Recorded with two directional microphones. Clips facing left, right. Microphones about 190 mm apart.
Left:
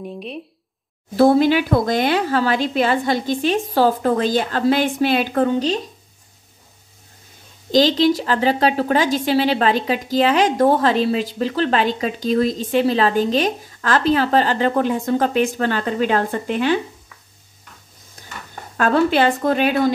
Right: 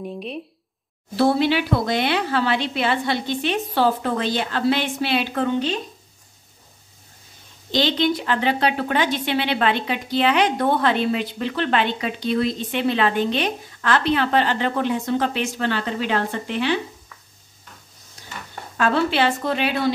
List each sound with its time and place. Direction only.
0.0 s speech: centre (ahead or behind)
1.1 s speech: 45° left (ahead or behind)
7.7 s a woman's voice: 40° left (ahead or behind)
18.8 s speech: 45° left (ahead or behind)